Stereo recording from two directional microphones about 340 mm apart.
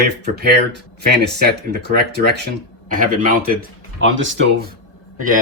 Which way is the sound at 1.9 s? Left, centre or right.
Right.